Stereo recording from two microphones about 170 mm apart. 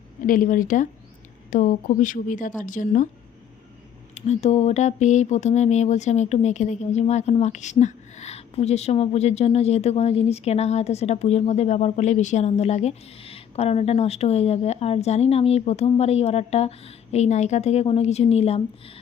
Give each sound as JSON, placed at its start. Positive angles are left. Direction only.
{"t": 0.2, "sound": "a woman's voice", "side_deg": 55}
{"t": 4.1, "sound": "speech", "side_deg": 40}